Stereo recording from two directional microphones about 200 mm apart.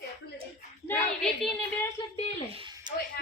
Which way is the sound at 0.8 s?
Centre (ahead or behind).